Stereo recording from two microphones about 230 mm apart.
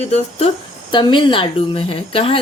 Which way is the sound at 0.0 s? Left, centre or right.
Left.